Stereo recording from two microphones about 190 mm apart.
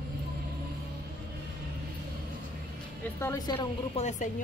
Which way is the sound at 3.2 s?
20° left (ahead or behind).